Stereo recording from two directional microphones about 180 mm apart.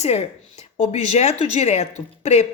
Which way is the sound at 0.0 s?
35° left (ahead or behind).